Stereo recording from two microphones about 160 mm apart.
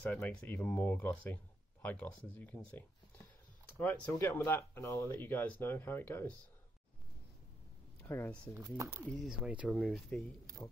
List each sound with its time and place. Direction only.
0.0 s speech: 10° left (ahead or behind)
3.7 s speech: 10° left (ahead or behind)
8.1 s speech: 10° left (ahead or behind)
8.5 s speech: 20° right (ahead or behind)
9.0 s speech: 5° left (ahead or behind)
9.4 s speech: 5° right (ahead or behind)
9.8 s speech: 5° left (ahead or behind)